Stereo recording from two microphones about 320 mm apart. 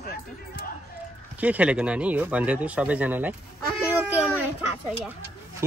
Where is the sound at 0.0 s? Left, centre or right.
Left.